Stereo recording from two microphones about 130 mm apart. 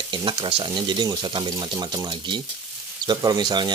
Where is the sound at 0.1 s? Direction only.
40° right (ahead or behind).